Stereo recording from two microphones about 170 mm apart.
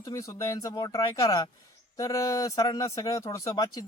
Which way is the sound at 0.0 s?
20° left (ahead or behind).